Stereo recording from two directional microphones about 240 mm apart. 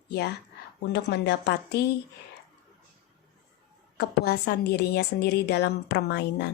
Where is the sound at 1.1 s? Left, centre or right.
Left.